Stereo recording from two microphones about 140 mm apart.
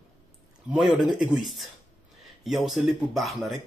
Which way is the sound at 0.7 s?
Centre (ahead or behind).